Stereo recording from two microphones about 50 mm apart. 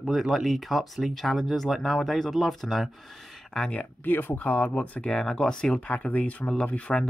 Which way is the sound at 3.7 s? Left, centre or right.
Left.